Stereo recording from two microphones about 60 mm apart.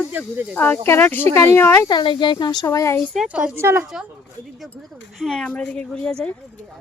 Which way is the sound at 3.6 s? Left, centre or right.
Right.